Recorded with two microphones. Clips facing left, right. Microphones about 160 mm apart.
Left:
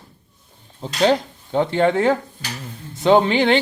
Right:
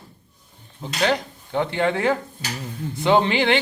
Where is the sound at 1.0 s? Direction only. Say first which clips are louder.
Left 5 dB; 20° left (ahead or behind).